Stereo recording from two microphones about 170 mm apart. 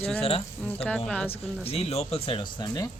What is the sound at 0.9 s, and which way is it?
Speech, 5° left (ahead or behind).